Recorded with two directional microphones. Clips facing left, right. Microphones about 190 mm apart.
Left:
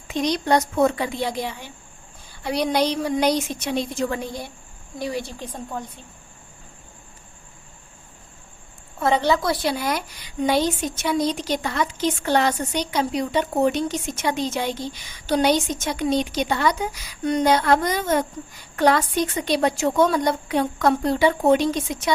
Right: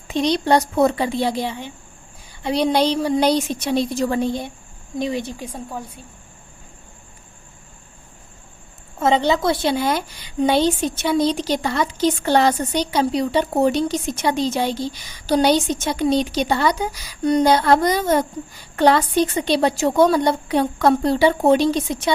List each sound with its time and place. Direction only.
0.1 s a woman's voice: 30° right (ahead or behind); by 5.8 s 10° right (ahead or behind)
9.0 s a woman's voice: 20° right (ahead or behind)